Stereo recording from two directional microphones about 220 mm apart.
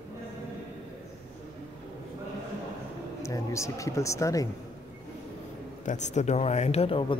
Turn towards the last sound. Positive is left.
turn(degrees=25)  # may be behind; listen again after turning